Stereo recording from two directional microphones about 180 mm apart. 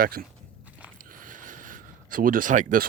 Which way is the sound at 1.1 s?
50° right (ahead or behind).